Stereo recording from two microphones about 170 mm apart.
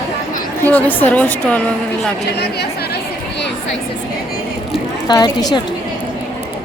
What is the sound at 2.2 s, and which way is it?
Speech, 75° left (ahead or behind).